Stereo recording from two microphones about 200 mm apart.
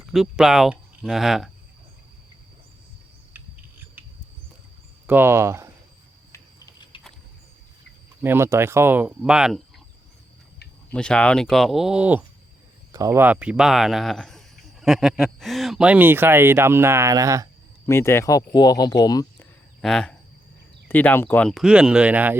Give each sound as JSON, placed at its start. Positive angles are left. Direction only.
{"t": 0.0, "sound": "speech", "side_deg": 0}
{"t": 3.3, "sound": "cricket", "side_deg": -10}
{"t": 5.0, "sound": "speech", "side_deg": -10}
{"t": 6.3, "sound": "a sound", "side_deg": 20}
{"t": 8.2, "sound": "speech", "side_deg": -10}
{"t": 10.9, "sound": "speech", "side_deg": 5}
{"t": 17.8, "sound": "speech", "side_deg": 15}
{"t": 19.8, "sound": "speech", "side_deg": 5}